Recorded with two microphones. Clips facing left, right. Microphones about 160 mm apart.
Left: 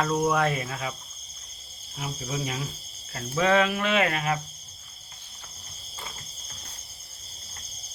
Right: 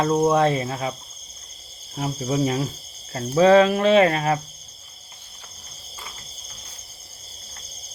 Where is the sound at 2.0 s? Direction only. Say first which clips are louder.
Right 9 dB; 45° right (ahead or behind).